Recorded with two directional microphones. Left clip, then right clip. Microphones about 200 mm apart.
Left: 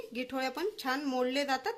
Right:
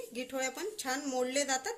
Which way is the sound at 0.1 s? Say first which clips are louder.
Left 2 dB; 40° left (ahead or behind).